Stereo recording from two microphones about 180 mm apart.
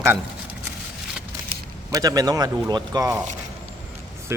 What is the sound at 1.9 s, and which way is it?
Speech, 20° right (ahead or behind).